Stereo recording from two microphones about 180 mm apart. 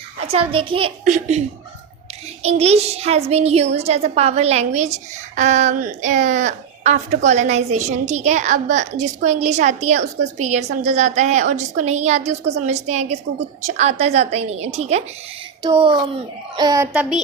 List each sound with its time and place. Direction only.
0.3 s a woman's voice: 30° right (ahead or behind)
1.0 s a woman's voice: 40° right (ahead or behind)
2.4 s a woman's voice: 35° right (ahead or behind)
16.6 s a child's voice: 20° right (ahead or behind)
16.9 s child singing: 5° right (ahead or behind)